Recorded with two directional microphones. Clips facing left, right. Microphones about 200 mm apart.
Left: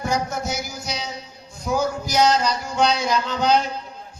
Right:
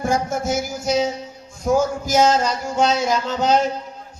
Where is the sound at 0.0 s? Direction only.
50° right (ahead or behind).